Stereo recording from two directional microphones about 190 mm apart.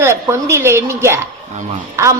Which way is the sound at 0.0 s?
15° right (ahead or behind).